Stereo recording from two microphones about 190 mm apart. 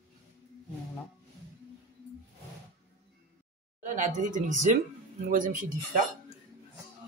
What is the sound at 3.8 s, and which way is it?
Speech, 40° right (ahead or behind).